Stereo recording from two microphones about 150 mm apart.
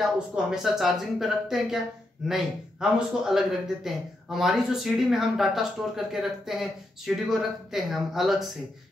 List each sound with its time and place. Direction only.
0.0 s a man's voice: 5° right (ahead or behind)